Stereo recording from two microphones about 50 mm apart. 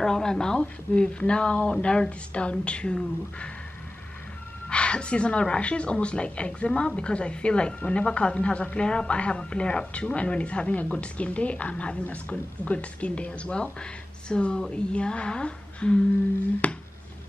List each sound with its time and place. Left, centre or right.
0.0 s a woman's voice: centre
4.6 s a woman's voice: left
16.6 s a sound: left